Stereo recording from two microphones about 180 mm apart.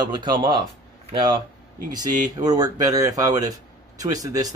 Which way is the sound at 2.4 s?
20° right (ahead or behind).